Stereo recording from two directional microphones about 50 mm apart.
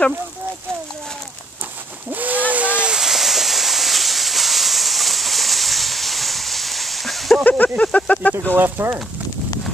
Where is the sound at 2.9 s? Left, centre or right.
Centre.